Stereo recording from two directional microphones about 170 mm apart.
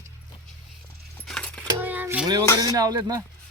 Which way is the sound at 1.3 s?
5° left (ahead or behind).